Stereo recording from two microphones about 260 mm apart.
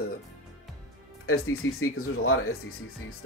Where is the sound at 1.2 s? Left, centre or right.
Left.